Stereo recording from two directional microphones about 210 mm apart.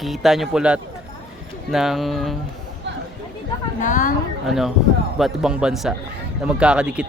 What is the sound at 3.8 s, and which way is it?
Speech, 40° left (ahead or behind).